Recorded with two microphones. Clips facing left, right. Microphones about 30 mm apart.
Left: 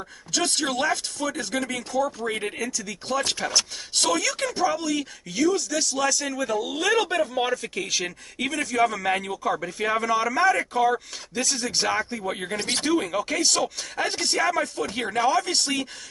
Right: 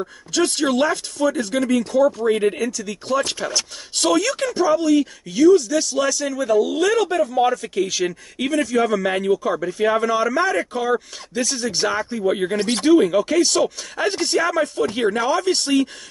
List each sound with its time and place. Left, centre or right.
0.0 s speech: centre
7.0 s speech: left
7.4 s speech: centre